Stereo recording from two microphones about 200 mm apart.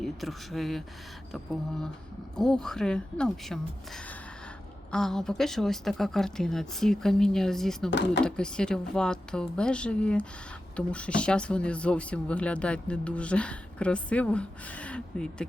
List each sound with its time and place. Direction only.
0.0 s speech: centre (ahead or behind)
7.9 s speech: 60° left (ahead or behind)
8.2 s speech: 5° left (ahead or behind)